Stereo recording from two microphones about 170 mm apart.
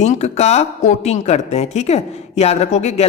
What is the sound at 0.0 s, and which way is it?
Speech, 40° left (ahead or behind).